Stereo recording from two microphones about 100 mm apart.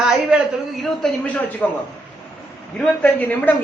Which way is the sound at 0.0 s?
5° right (ahead or behind).